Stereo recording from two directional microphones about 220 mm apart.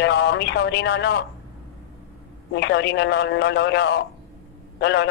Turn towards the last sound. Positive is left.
turn(degrees=50)  # may be behind; listen again after turning